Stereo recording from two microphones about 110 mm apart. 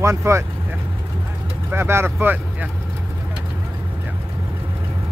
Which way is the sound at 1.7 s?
20° right (ahead or behind).